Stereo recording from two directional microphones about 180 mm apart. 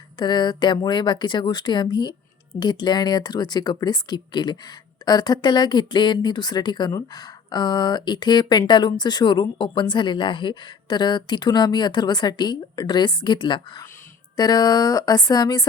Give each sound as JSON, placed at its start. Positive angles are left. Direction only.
{"t": 0.2, "sound": "speech", "side_deg": 25}